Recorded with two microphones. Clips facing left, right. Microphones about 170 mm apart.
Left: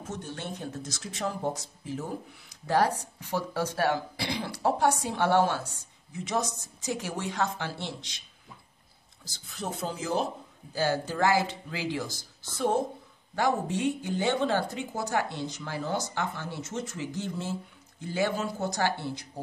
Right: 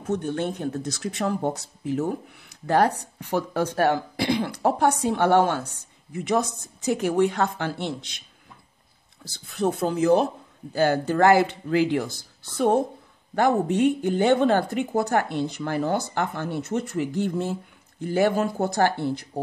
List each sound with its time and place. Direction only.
0.0 s speech: 60° right (ahead or behind)
9.2 s speech: 60° right (ahead or behind)